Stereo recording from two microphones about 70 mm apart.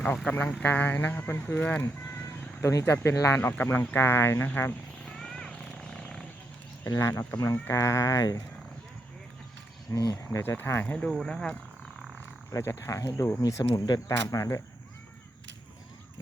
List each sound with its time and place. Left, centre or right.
0.3 s speech: left
2.6 s speech: left
5.0 s vehicle: centre
5.8 s wild animals: centre
6.8 s speech: left
7.3 s speech: left
9.9 s speech: left
10.2 s speech: left
10.9 s speech: centre
12.7 s speech: left